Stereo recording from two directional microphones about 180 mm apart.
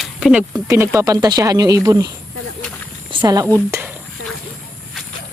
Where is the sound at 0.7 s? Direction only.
20° right (ahead or behind).